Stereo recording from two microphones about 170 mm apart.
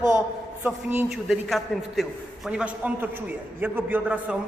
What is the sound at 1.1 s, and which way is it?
A man's voice, centre (ahead or behind).